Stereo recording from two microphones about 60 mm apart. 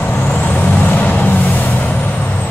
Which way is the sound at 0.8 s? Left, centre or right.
Left.